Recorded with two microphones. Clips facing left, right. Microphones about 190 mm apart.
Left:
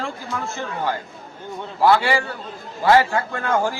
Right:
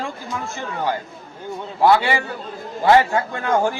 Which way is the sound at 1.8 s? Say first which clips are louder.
Right 1 dB; 20° right (ahead or behind).